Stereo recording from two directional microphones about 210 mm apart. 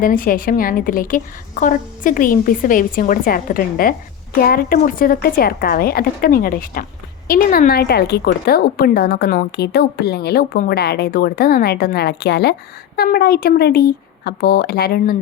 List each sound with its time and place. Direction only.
0.0 s a woman's voice: 40° left (ahead or behind)